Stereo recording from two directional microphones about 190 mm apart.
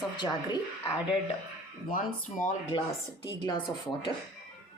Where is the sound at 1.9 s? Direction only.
45° left (ahead or behind).